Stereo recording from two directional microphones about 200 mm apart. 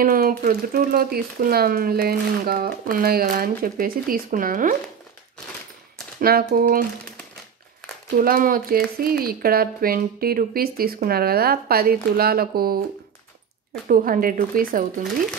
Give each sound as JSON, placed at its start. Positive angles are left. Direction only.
{"t": 0.0, "sound": "speech", "side_deg": -45}
{"t": 6.1, "sound": "speech", "side_deg": -45}
{"t": 8.2, "sound": "speech", "side_deg": -45}
{"t": 13.8, "sound": "speech", "side_deg": -45}